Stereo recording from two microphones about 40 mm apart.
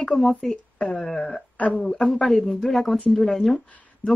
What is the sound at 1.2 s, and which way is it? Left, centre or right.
Speech, left.